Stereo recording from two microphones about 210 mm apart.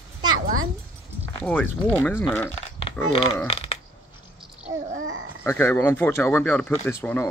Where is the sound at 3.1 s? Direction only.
25° left (ahead or behind).